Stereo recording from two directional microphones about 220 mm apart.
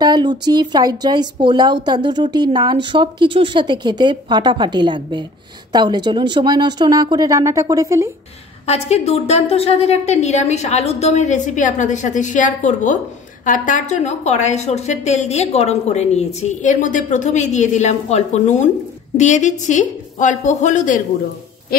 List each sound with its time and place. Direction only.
0.0 s speech: 20° right (ahead or behind)
8.6 s a woman's voice: 30° left (ahead or behind)